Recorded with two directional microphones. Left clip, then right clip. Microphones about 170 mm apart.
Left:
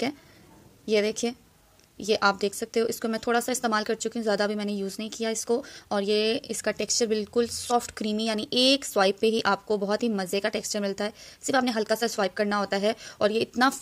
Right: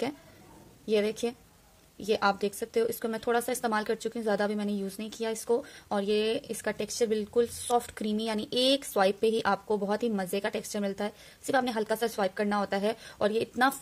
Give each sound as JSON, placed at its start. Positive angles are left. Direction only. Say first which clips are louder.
{"t": 0.8, "sound": "speech", "louder": "left 3 dB", "side_deg": 25}